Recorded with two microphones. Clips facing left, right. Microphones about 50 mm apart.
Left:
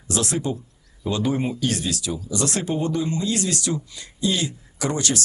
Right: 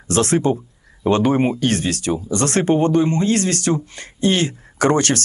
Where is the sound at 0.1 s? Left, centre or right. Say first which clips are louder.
Right 8 dB; right.